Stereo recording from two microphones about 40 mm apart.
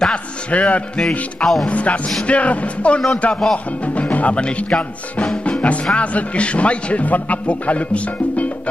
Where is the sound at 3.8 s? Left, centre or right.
Left.